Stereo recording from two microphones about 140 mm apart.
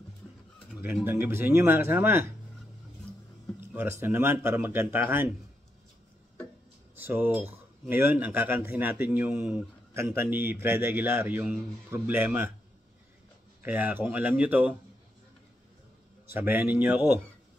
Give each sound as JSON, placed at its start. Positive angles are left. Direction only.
{"t": 1.0, "sound": "a man's voice", "side_deg": -15}
{"t": 4.0, "sound": "a man's voice", "side_deg": -15}
{"t": 7.0, "sound": "a man's voice", "side_deg": -15}
{"t": 13.6, "sound": "a man's voice", "side_deg": -15}
{"t": 16.3, "sound": "a man's voice", "side_deg": -15}